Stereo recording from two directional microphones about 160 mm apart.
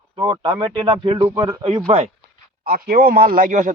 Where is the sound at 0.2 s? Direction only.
30° right (ahead or behind).